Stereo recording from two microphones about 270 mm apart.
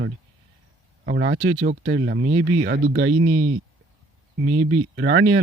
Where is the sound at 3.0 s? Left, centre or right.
Right.